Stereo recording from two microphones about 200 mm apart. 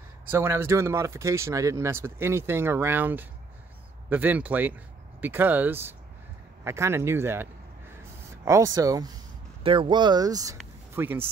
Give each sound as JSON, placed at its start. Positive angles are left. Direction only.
{"t": 0.3, "sound": "speech", "side_deg": -10}
{"t": 8.5, "sound": "speech", "side_deg": -15}